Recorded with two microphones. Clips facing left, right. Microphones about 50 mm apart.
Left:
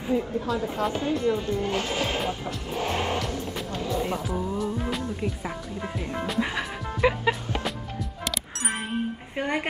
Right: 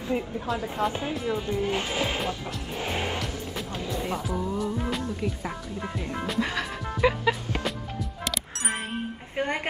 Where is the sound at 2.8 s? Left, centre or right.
Centre.